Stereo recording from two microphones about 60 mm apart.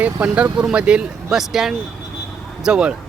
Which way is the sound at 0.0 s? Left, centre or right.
Right.